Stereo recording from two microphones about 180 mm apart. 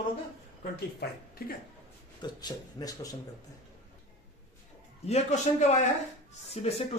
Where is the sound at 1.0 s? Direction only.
65° left (ahead or behind).